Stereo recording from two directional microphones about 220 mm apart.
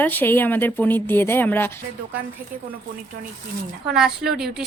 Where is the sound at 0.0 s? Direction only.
10° left (ahead or behind).